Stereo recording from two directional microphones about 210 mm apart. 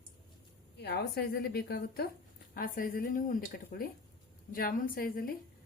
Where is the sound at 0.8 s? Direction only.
50° left (ahead or behind).